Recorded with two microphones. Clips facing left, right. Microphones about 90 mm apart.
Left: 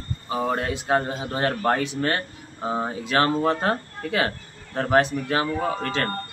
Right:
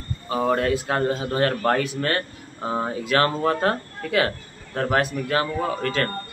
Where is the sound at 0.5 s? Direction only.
25° left (ahead or behind).